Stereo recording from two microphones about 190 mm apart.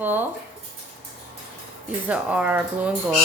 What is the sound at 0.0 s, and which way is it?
Speech, 10° right (ahead or behind).